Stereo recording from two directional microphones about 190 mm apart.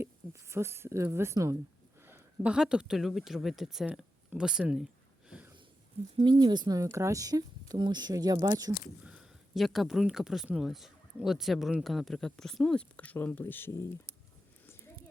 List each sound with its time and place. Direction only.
0.0 s speech: 15° right (ahead or behind)
5.3 s sniff: 10° right (ahead or behind)
6.2 s speech: 30° right (ahead or behind)
6.7 s speech: 15° right (ahead or behind)
9.0 s speech: 5° right (ahead or behind); by 14.2 s 15° left (ahead or behind)